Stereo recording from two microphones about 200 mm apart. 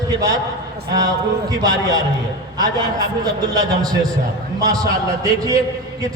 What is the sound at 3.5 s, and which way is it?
Speech, 20° right (ahead or behind).